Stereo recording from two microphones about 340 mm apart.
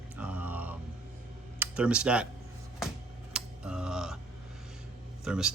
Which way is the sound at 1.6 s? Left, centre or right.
Centre.